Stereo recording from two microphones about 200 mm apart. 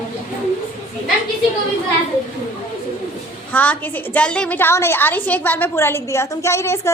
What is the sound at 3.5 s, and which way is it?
A woman's voice, 10° left (ahead or behind).